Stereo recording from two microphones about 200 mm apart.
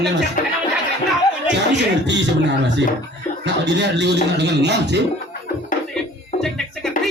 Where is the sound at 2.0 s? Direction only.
60° right (ahead or behind).